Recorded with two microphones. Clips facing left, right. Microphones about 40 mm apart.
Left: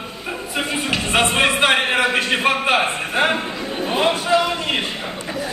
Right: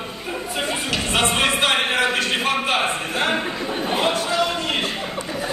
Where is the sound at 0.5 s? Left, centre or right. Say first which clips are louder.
Left 3 dB; centre.